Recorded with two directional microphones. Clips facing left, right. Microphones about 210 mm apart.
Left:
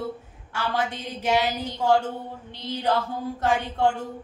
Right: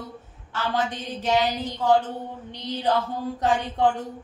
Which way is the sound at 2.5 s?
15° right (ahead or behind).